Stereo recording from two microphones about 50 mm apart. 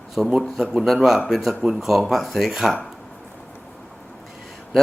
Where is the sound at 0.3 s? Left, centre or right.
Centre.